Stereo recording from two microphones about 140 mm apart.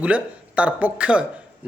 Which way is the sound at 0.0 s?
10° right (ahead or behind).